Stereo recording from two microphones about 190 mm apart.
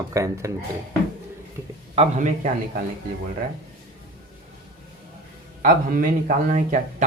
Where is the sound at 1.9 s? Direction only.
35° right (ahead or behind).